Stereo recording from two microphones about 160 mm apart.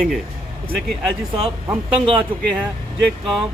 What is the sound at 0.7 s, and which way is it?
Speech, 5° left (ahead or behind).